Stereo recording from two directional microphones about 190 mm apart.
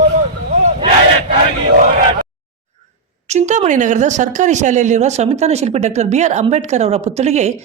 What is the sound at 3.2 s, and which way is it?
Speech, 40° right (ahead or behind).